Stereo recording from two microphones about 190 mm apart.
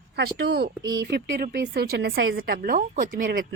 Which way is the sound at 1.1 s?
55° right (ahead or behind).